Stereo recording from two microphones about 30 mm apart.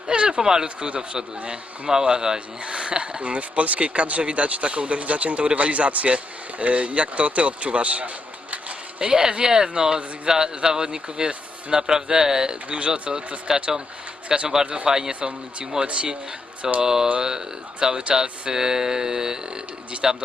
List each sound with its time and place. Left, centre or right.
0.1 s a sound: right
0.4 s speech: right
0.8 s speech: right
1.9 s speech: right
9.0 s speech: right
12.6 s speech: right
13.5 s speech: centre
14.3 s speech: right
14.8 s speech: right
15.8 s speech: right
16.8 s speech: centre